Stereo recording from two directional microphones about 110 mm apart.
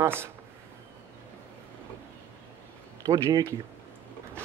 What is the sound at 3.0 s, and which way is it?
Speech, 35° right (ahead or behind).